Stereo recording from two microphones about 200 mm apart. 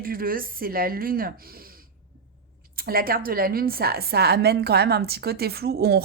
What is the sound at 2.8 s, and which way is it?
A woman's voice, 45° right (ahead or behind).